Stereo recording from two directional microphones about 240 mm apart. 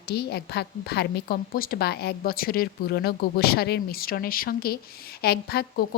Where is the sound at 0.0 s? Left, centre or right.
Left.